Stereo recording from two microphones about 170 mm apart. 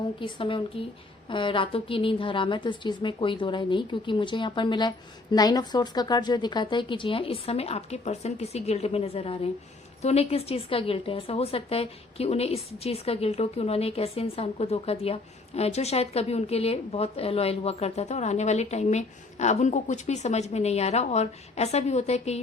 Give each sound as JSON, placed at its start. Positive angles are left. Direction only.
{"t": 0.2, "sound": "a woman's voice", "side_deg": 30}